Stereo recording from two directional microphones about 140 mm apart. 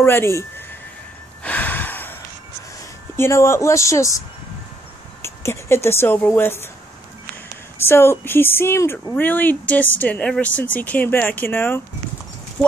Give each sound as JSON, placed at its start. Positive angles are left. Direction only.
{"t": 0.0, "sound": "speech", "side_deg": 15}
{"t": 1.4, "sound": "a sound", "side_deg": 10}
{"t": 3.2, "sound": "speech", "side_deg": 20}
{"t": 5.2, "sound": "speech", "side_deg": 20}
{"t": 7.8, "sound": "a woman's voice", "side_deg": 15}
{"t": 12.6, "sound": "speech", "side_deg": 0}